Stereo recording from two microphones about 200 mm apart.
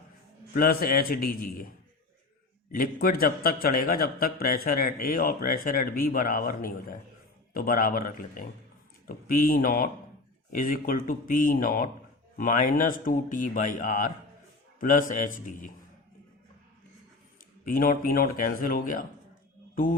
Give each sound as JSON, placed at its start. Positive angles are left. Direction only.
{"t": 0.5, "sound": "a man's voice", "side_deg": 50}
{"t": 2.7, "sound": "a man's voice", "side_deg": 45}
{"t": 17.7, "sound": "a man's voice", "side_deg": 45}